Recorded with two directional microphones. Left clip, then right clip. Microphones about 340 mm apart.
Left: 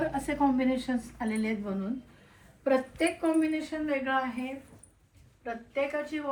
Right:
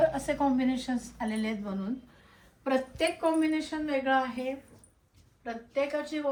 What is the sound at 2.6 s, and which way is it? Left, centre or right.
Speech, right.